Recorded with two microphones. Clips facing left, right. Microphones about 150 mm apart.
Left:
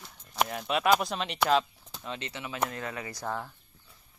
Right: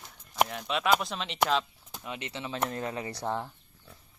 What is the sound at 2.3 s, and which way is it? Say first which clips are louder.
Speech: right 1 dB; 25° right (ahead or behind).